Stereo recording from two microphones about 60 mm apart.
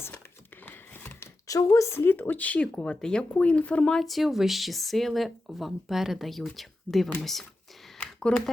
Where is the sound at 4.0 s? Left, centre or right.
Centre.